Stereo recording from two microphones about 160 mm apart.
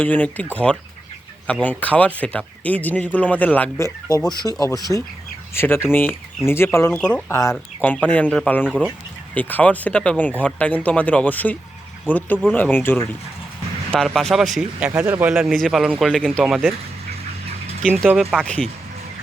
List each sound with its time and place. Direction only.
0.0 s speech: 10° left (ahead or behind)
4.3 s speech: 25° left (ahead or behind)
5.5 s speech: 15° left (ahead or behind)
7.3 s speech: 20° left (ahead or behind)
7.5 s speech: 5° left (ahead or behind)
8.6 s speech: 5° right (ahead or behind)
9.3 s speech: 10° left (ahead or behind)
13.9 s speech: 5° left (ahead or behind)
18.1 s speech: 5° right (ahead or behind)
18.4 s speech: 5° left (ahead or behind)